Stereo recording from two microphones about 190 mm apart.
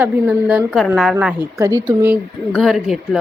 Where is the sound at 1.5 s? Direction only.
15° right (ahead or behind).